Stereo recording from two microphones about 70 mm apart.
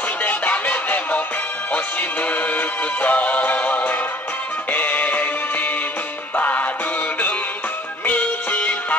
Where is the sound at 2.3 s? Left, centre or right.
Left.